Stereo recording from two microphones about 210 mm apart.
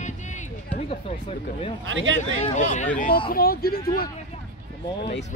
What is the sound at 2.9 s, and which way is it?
Speech, 40° left (ahead or behind).